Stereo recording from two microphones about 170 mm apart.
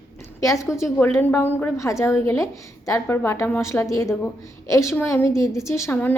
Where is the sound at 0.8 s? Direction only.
15° left (ahead or behind).